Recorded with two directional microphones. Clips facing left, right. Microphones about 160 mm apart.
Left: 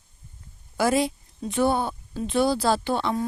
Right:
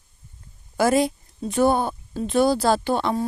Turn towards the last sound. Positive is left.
turn(degrees=-45)  # may be behind; listen again after turning